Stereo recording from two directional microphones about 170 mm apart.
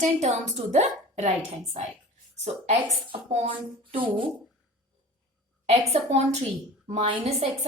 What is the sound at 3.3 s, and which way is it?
Speech, 35° right (ahead or behind).